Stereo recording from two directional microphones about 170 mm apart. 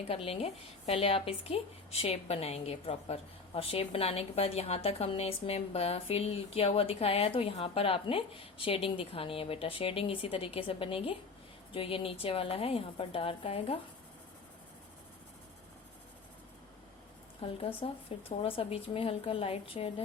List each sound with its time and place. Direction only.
0.1 s a woman's voice: 35° left (ahead or behind)
17.4 s a woman's voice: 30° left (ahead or behind)